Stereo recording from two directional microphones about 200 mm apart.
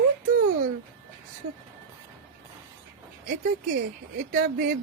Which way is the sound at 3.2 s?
40° right (ahead or behind).